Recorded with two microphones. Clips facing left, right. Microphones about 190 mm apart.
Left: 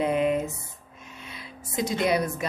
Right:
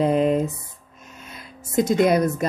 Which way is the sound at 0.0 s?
35° right (ahead or behind).